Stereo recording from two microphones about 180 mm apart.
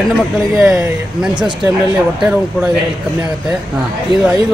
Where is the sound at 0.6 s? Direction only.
10° right (ahead or behind).